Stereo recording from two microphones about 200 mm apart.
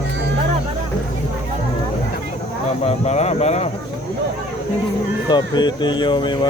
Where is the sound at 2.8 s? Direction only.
35° left (ahead or behind).